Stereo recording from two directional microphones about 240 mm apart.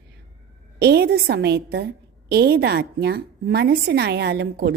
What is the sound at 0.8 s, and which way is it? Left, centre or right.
A woman's voice, right.